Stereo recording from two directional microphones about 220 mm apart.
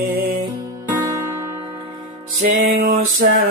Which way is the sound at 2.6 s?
45° right (ahead or behind).